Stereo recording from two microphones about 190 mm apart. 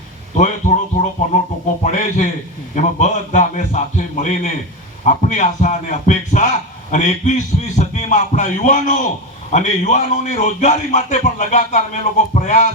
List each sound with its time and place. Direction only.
0.3 s a man's voice: 40° left (ahead or behind)